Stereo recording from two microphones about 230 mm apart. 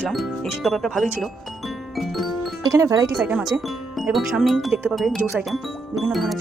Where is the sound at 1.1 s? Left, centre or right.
Centre.